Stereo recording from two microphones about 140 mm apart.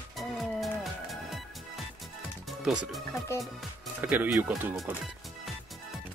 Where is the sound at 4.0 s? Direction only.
15° right (ahead or behind).